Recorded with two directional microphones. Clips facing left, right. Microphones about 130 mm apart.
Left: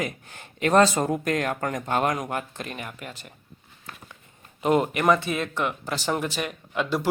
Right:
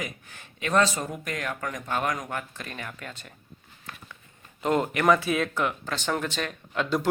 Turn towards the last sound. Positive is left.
turn(degrees=5)  # may be behind; listen again after turning